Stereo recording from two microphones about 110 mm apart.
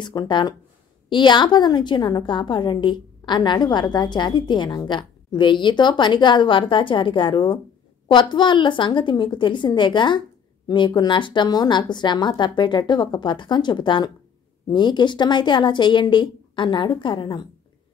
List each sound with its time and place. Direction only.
0.0 s a woman's voice: 45° left (ahead or behind)